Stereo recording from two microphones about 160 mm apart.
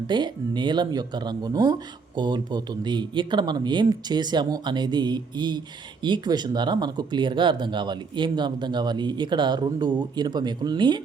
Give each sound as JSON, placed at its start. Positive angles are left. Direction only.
{"t": 0.1, "sound": "speech", "side_deg": -30}